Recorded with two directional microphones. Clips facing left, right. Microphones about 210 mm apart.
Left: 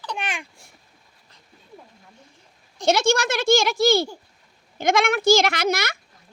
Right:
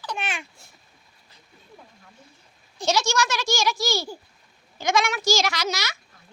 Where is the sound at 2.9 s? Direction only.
55° left (ahead or behind).